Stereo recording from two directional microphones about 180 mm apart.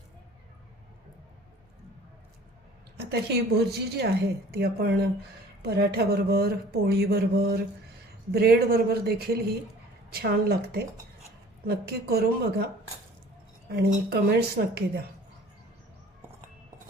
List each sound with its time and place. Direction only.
3.1 s speech: 65° right (ahead or behind)
13.7 s speech: 65° right (ahead or behind)